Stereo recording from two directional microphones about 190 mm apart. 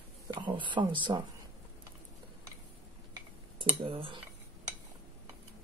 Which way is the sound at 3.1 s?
25° right (ahead or behind).